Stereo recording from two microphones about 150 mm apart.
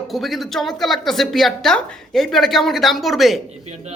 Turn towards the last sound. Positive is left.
turn(degrees=0)  # may be behind; listen again after turning